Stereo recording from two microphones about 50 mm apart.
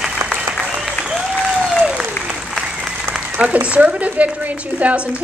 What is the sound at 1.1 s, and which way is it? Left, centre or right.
Applause, centre.